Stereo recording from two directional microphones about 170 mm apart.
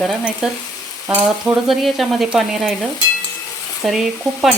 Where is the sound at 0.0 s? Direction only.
Centre (ahead or behind).